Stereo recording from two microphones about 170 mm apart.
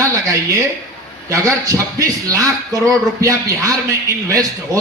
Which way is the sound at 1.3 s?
20° right (ahead or behind).